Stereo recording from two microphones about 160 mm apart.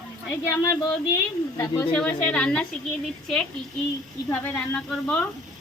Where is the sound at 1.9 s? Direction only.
5° left (ahead or behind).